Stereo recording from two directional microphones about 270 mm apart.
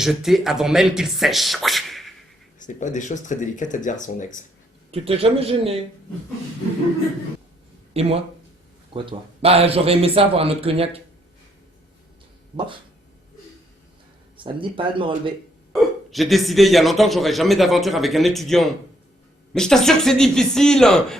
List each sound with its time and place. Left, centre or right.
0.0 s speech: centre
2.6 s speech: left
4.9 s a man's voice: right
7.9 s a man's voice: right
14.3 s a man's voice: centre
15.7 s speech: centre